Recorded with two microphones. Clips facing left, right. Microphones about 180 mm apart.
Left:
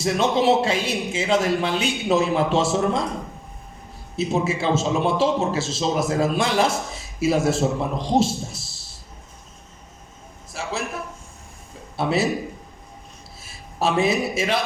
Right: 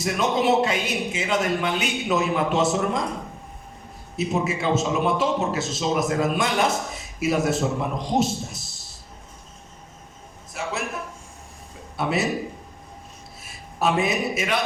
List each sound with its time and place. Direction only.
0.0 s a man's voice: 30° left (ahead or behind)
4.2 s a man's voice: 30° left (ahead or behind)
10.5 s a sound: 30° left (ahead or behind)
11.9 s a man's voice: 30° left (ahead or behind)
13.4 s a man's voice: 30° left (ahead or behind)